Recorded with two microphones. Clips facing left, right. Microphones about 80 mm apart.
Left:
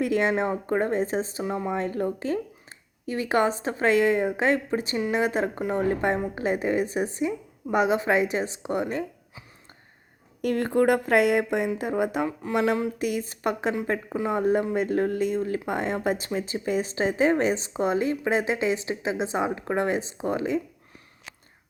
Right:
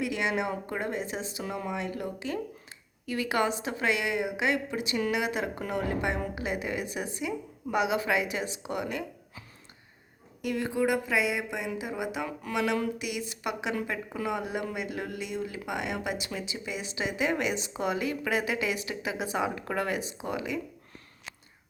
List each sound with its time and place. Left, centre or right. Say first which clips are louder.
0.0 s speech: left 6 dB; left
10.4 s speech: left 6 dB; left
12.4 s a sound: left 4 dB; left
13.0 s speech: left 7 dB; left